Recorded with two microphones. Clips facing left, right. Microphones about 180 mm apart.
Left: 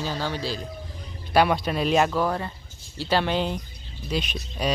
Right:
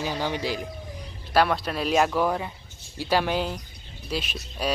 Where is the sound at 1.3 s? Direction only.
Centre (ahead or behind).